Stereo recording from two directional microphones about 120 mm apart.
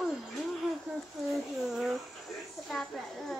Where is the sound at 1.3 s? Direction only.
Centre (ahead or behind).